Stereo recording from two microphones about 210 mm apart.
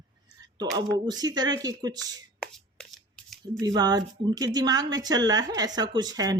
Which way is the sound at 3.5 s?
15° right (ahead or behind).